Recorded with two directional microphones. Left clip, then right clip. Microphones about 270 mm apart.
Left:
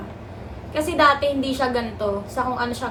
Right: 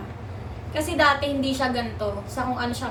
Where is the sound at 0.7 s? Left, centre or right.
Centre.